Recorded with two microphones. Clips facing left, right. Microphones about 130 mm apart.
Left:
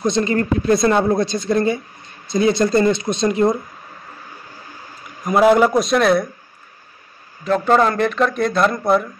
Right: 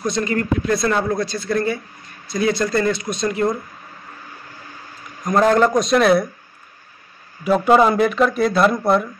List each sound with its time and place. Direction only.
0.0 s a woman's voice: 25° left (ahead or behind)
5.2 s a man's voice: 10° left (ahead or behind)
7.4 s speech: 10° right (ahead or behind)